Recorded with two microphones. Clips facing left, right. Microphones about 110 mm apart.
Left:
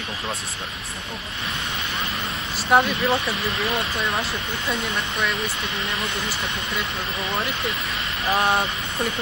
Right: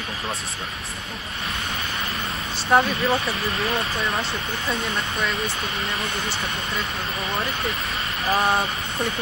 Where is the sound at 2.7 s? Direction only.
5° left (ahead or behind).